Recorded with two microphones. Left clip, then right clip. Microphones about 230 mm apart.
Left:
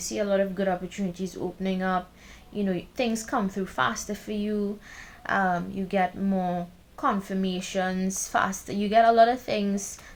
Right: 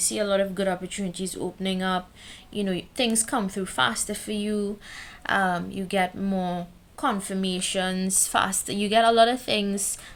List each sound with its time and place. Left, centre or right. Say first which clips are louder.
0.1 s speech: even; right